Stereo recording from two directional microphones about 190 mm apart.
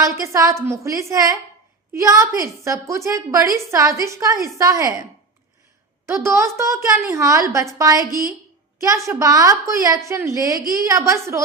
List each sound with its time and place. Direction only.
0.0 s a woman's voice: 15° right (ahead or behind)
6.1 s a woman's voice: 15° right (ahead or behind)